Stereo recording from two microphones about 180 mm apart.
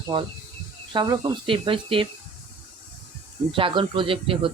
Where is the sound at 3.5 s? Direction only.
30° right (ahead or behind).